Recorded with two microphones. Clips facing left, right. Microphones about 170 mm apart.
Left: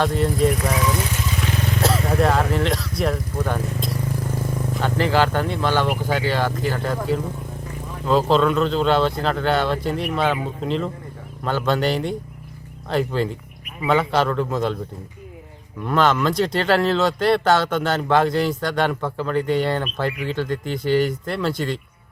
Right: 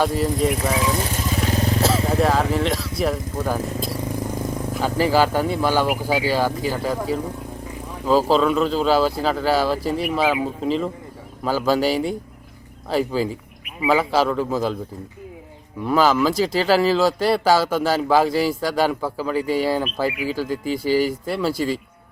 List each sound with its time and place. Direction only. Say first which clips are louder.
0.0 s speech: left 1 dB; 5° right (ahead or behind)
0.9 s motorcycle: right 2 dB; 35° right (ahead or behind)
2.0 s speech: even; centre (ahead or behind)
15.8 s speech: right 1 dB; 5° right (ahead or behind)